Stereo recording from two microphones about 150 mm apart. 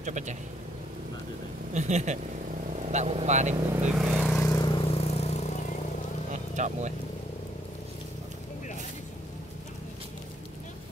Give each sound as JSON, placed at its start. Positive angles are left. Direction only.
{"t": 0.0, "sound": "speech", "side_deg": -55}
{"t": 1.7, "sound": "speech", "side_deg": -50}
{"t": 3.9, "sound": "vehicle", "side_deg": -5}
{"t": 4.3, "sound": "vehicle", "side_deg": 20}
{"t": 6.5, "sound": "speech", "side_deg": -50}